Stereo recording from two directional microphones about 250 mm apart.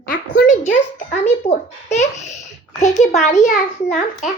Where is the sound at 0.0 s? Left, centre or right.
Left.